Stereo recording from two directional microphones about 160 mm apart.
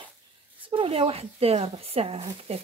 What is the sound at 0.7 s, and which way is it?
Speech, 35° right (ahead or behind).